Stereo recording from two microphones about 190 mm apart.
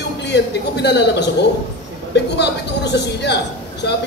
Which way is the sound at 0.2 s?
65° left (ahead or behind).